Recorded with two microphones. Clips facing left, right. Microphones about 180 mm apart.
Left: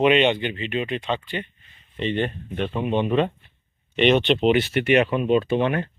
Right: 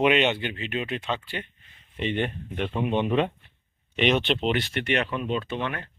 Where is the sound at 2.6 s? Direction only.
10° left (ahead or behind).